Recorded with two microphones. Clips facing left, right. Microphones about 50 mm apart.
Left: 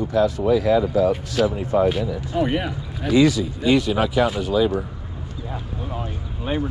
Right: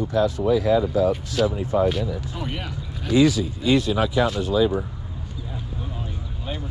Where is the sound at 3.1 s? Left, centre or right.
Left.